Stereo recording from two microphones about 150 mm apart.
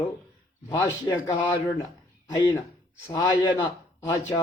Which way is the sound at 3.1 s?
30° left (ahead or behind).